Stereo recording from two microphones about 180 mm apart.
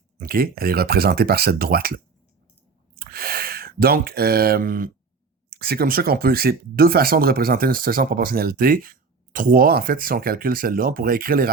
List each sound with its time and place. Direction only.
0.2 s speech: 55° right (ahead or behind)